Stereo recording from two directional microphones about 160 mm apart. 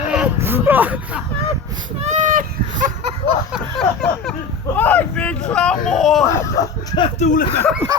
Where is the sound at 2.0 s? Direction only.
50° right (ahead or behind).